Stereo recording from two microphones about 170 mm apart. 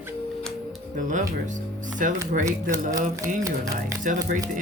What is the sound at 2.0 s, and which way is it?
Speech, 50° right (ahead or behind).